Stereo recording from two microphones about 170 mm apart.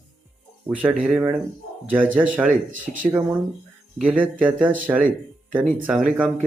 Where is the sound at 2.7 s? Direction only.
50° right (ahead or behind).